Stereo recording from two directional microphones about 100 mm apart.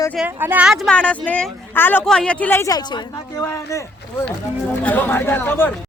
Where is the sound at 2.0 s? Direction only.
10° left (ahead or behind).